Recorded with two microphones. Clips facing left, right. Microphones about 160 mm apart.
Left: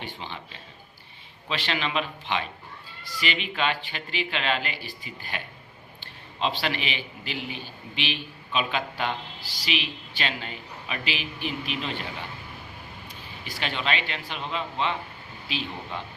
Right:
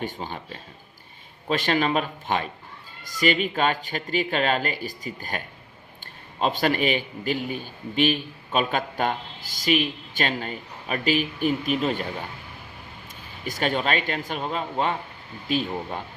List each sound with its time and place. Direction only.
0.0 s a man's voice: 45° right (ahead or behind)
13.4 s a man's voice: 45° right (ahead or behind)